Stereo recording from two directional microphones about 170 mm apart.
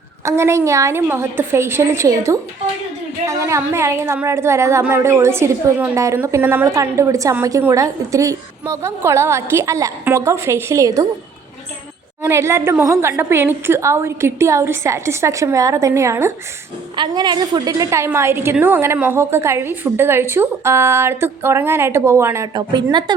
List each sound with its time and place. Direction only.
0.3 s speech: 15° right (ahead or behind)
12.2 s speech: 15° right (ahead or behind)
16.9 s speech: 25° right (ahead or behind)